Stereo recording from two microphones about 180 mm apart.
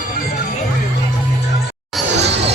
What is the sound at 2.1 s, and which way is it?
Music, 70° right (ahead or behind).